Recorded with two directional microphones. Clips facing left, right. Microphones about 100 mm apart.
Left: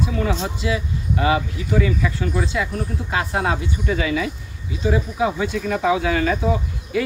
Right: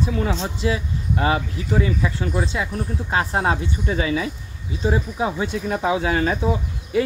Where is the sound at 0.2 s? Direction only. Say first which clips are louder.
Even; 35° right (ahead or behind).